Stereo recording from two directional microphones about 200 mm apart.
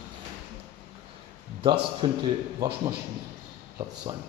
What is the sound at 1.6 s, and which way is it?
Speech, 25° right (ahead or behind).